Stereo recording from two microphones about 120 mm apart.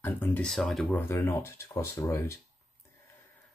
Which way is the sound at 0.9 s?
20° left (ahead or behind).